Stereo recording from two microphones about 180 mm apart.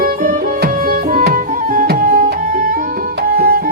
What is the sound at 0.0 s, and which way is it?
Music, 50° right (ahead or behind).